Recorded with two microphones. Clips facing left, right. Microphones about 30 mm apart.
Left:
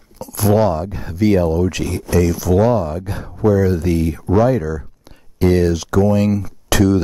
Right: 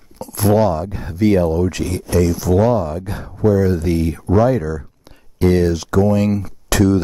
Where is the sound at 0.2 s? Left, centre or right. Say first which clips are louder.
Even; right.